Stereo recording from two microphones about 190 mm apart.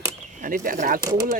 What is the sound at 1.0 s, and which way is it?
Speech, 15° right (ahead or behind).